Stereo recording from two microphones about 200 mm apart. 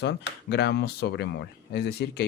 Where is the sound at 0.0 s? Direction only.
55° left (ahead or behind).